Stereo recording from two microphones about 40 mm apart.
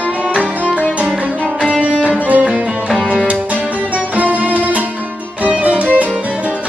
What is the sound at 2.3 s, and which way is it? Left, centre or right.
Music, right.